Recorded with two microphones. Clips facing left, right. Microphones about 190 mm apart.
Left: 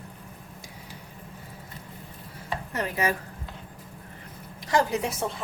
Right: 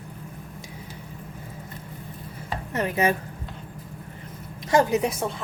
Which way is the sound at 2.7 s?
25° right (ahead or behind).